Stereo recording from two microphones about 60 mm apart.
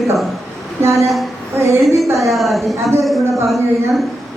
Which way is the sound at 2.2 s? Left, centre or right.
Centre.